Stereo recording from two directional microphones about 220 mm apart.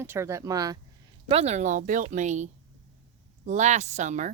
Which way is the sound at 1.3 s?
30° right (ahead or behind).